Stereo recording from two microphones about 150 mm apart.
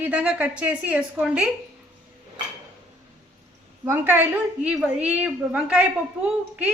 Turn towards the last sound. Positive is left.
turn(degrees=-10)  # may be behind; listen again after turning